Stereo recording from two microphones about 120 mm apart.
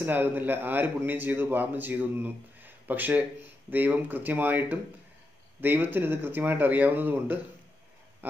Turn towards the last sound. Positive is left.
turn(degrees=-15)  # may be behind; listen again after turning